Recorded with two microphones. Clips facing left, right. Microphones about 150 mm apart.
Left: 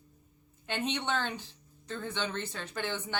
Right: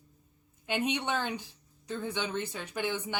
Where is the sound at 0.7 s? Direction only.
10° right (ahead or behind).